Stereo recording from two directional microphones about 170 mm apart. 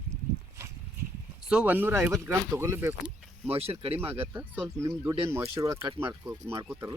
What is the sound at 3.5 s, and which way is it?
Speech, 35° right (ahead or behind).